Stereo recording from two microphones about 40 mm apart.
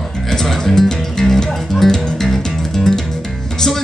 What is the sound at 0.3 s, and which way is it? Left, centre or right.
Music, centre.